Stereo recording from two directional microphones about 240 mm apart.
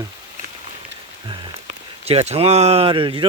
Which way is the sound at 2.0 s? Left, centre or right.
Right.